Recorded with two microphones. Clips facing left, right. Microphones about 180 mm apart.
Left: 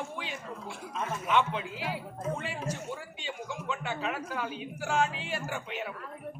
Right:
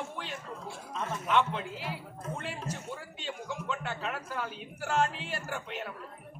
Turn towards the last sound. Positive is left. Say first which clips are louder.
# left 2 dB
turn(degrees=0)  # may be behind; listen again after turning